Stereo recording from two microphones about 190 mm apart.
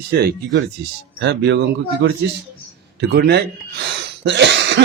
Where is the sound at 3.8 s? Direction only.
65° right (ahead or behind).